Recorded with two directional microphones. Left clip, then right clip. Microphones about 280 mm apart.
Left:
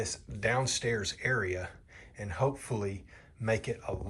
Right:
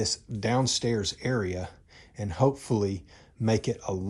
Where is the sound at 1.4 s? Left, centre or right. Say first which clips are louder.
Right 2 dB; right.